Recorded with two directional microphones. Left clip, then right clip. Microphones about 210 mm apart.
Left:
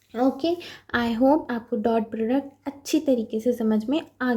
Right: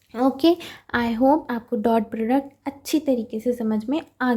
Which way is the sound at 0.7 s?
15° right (ahead or behind).